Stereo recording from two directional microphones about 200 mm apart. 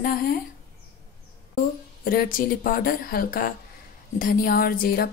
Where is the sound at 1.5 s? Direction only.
45° left (ahead or behind).